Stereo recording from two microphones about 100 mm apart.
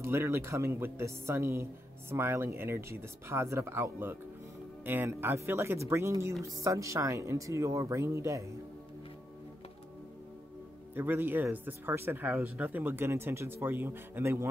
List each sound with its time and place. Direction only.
0.0 s speech: 25° right (ahead or behind)
11.0 s speech: 20° right (ahead or behind)